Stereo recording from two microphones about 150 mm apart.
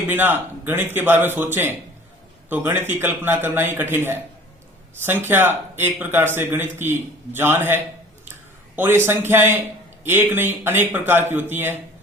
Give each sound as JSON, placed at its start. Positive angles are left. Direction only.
{"t": 0.1, "sound": "speech", "side_deg": -15}